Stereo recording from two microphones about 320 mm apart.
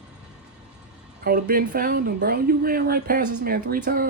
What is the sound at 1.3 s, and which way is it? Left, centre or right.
Speech, right.